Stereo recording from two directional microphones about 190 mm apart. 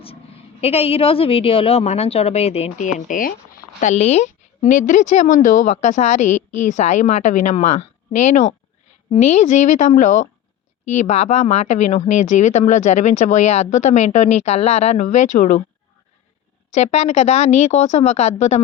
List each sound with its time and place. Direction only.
0.6 s a woman's voice: 30° left (ahead or behind)
16.7 s a woman's voice: 35° left (ahead or behind)